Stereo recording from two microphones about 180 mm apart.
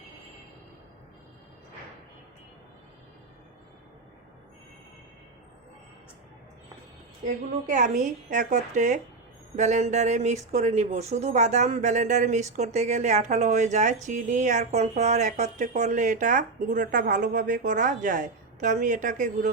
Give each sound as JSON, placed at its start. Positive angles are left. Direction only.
{"t": 7.3, "sound": "a woman's voice", "side_deg": -45}